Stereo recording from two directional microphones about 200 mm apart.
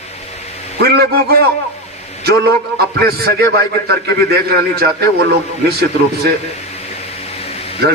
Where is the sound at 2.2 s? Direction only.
55° right (ahead or behind).